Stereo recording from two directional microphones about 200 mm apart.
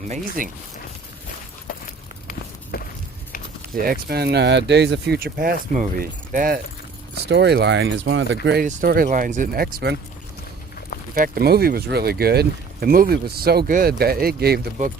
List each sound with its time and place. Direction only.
0.1 s speech: 40° right (ahead or behind)
2.7 s a sound: 50° left (ahead or behind)
3.8 s speech: 45° right (ahead or behind)
7.3 s speech: 55° right (ahead or behind)
8.6 s speech: 45° right (ahead or behind)
11.1 s speech: 50° right (ahead or behind)